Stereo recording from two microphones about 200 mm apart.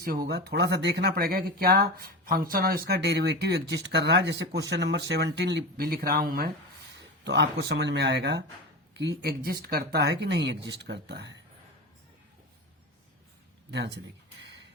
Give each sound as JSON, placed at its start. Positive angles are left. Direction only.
{"t": 0.0, "sound": "speech", "side_deg": -50}
{"t": 7.0, "sound": "speech", "side_deg": -60}
{"t": 13.7, "sound": "speech", "side_deg": -60}
{"t": 14.4, "sound": "a sound", "side_deg": -60}